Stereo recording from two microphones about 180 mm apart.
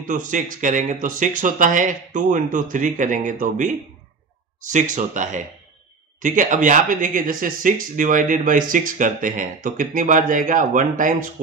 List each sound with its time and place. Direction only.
0.0 s speech: 45° right (ahead or behind)